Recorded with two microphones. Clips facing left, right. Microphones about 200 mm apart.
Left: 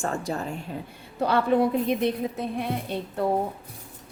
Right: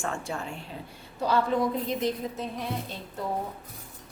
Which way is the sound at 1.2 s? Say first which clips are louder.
Left 4 dB; 60° left (ahead or behind).